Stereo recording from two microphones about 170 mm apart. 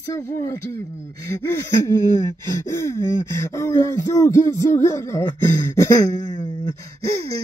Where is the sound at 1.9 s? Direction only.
15° left (ahead or behind).